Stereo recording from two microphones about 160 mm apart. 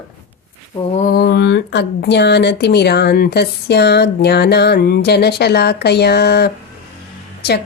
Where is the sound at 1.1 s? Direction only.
80° left.